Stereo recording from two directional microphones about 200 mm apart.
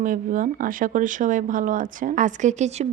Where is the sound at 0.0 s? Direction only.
40° right (ahead or behind).